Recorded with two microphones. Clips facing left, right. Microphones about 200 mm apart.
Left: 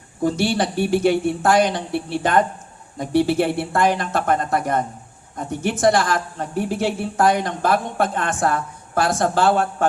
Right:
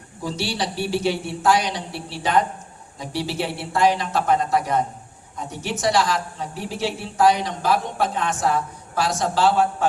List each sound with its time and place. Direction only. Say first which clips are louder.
0.2 s a woman's voice: left 7 dB; 55° left (ahead or behind)